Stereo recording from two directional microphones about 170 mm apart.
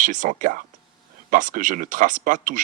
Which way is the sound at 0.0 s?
50° right (ahead or behind).